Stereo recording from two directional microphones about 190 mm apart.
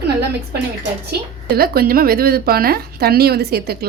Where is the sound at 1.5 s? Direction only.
55° right (ahead or behind).